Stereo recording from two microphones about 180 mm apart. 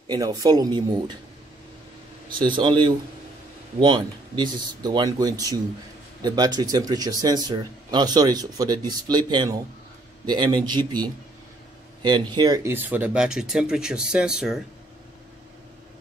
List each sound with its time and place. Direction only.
0.1 s speech: 20° right (ahead or behind)
2.3 s speech: 25° right (ahead or behind); by 14.6 s 5° right (ahead or behind)